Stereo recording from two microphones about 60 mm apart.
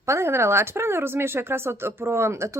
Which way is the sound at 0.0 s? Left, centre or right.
Right.